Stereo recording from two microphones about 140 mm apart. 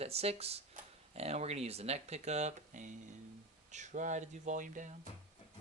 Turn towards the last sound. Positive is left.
turn(degrees=-65)  # may be behind; listen again after turning